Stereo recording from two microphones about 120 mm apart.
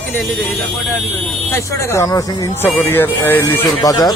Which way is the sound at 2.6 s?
15° left (ahead or behind).